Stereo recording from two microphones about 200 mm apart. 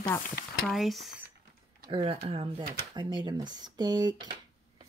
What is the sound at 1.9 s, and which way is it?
Speech, 25° right (ahead or behind).